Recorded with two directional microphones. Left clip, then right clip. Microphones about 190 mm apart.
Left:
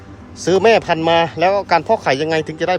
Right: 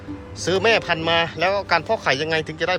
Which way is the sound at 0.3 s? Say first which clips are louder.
Left 6 dB; 40° left (ahead or behind).